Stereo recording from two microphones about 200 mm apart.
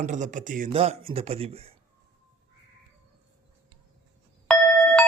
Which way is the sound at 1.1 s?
30° right (ahead or behind).